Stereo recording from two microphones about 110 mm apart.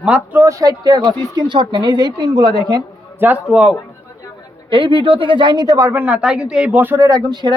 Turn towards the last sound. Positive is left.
turn(degrees=-40)  # may be behind; listen again after turning